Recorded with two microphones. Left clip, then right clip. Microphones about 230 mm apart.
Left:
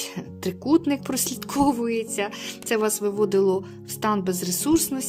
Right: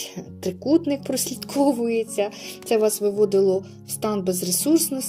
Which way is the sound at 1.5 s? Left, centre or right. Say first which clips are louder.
Right 1 dB; left.